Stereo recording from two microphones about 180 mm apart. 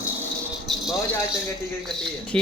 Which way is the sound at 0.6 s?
Centre (ahead or behind).